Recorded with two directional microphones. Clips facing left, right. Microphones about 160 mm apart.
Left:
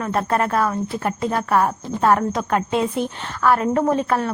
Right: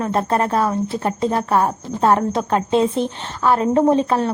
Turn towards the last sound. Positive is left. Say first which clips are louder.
# right 4 dB
turn(degrees=-25)  # may be behind; listen again after turning